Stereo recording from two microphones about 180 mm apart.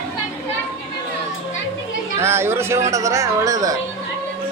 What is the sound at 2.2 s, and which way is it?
Speech, 15° right (ahead or behind).